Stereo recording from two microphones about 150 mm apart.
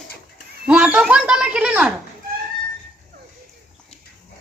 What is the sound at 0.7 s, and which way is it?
Speech, 5° right (ahead or behind).